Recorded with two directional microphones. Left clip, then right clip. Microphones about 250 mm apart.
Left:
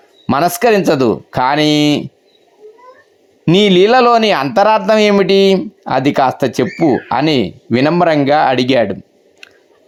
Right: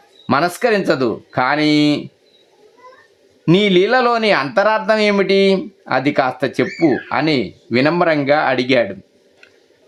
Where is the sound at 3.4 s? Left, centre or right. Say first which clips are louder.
Left 4 dB; centre.